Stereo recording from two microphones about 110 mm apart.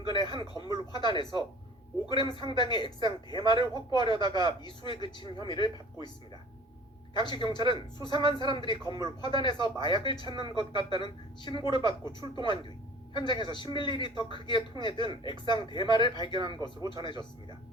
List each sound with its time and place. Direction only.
0.1 s speech: 45° left (ahead or behind)
7.1 s speech: 45° left (ahead or behind)
13.1 s speech: 45° left (ahead or behind)